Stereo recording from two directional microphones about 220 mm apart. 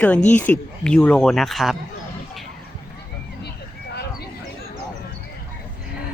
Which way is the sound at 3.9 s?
50° left (ahead or behind).